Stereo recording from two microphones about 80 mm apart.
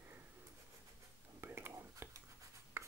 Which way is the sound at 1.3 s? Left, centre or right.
Right.